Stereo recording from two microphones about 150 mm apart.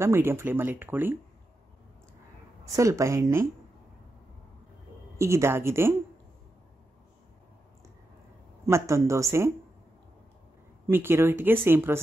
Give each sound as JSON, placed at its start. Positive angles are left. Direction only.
{"t": 0.0, "sound": "speech", "side_deg": -15}
{"t": 2.7, "sound": "speech", "side_deg": -20}
{"t": 5.1, "sound": "speech", "side_deg": -20}
{"t": 8.6, "sound": "speech", "side_deg": -20}
{"t": 10.9, "sound": "speech", "side_deg": -15}